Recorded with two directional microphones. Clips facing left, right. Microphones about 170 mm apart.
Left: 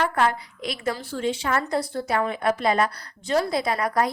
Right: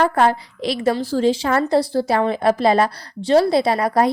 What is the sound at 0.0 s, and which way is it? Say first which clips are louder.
A woman's voice: right 6 dB; 30° right (ahead or behind).